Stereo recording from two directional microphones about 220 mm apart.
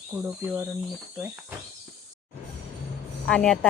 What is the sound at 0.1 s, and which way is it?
Speech, 5° right (ahead or behind).